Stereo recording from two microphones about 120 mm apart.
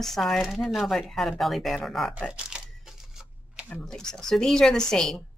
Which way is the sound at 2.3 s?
5° right (ahead or behind).